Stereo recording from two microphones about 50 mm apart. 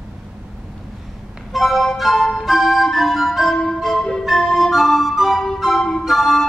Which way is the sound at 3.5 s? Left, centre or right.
Centre.